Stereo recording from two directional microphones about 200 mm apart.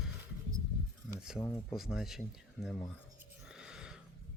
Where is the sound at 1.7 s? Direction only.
Centre (ahead or behind).